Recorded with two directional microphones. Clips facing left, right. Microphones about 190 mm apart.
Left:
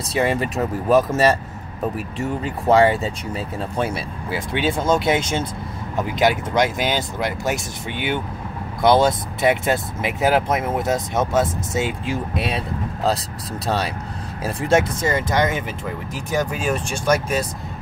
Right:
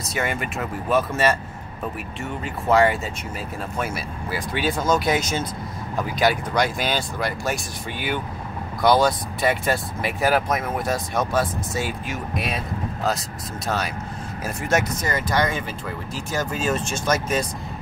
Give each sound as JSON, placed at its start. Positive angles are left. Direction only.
{"t": 0.1, "sound": "speech", "side_deg": 30}
{"t": 2.4, "sound": "speech", "side_deg": 30}
{"t": 14.4, "sound": "speech", "side_deg": 30}